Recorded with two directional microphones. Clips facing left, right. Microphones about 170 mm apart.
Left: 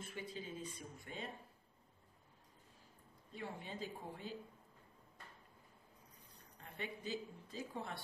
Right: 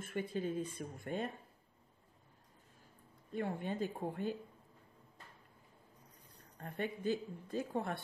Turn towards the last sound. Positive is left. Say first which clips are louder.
# right 8 dB
turn(degrees=-55)  # may be behind; listen again after turning